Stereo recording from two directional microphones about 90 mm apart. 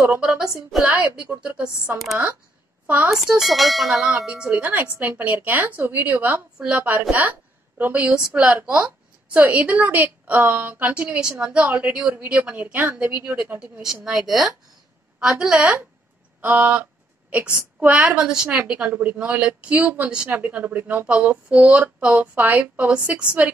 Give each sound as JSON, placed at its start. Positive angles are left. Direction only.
{"t": 0.1, "sound": "a woman's voice", "side_deg": -10}
{"t": 3.1, "sound": "a woman's voice", "side_deg": -5}
{"t": 16.3, "sound": "a sound", "side_deg": -20}
{"t": 17.7, "sound": "a woman's voice", "side_deg": -15}